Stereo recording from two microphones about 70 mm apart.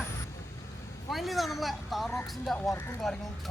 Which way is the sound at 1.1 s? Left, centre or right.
Centre.